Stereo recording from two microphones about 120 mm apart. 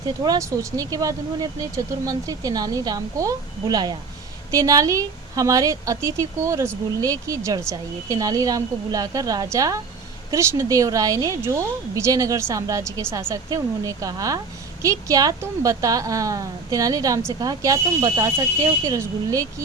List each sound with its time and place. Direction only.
0.3 s a woman's voice: 25° right (ahead or behind)